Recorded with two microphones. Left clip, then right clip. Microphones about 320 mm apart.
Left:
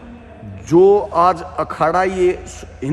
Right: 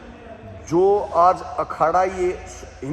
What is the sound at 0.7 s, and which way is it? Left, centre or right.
A man's voice, left.